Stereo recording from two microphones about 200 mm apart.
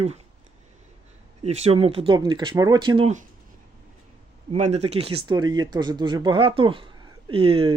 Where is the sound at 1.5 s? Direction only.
30° right (ahead or behind).